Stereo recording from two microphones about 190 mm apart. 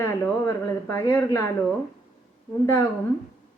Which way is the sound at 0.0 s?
15° left (ahead or behind).